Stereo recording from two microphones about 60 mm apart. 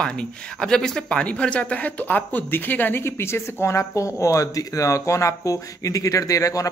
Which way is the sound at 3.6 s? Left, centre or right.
Left.